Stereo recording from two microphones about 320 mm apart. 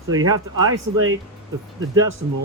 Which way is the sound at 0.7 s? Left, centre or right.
Right.